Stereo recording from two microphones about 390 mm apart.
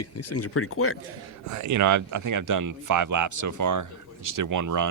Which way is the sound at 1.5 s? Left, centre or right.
Right.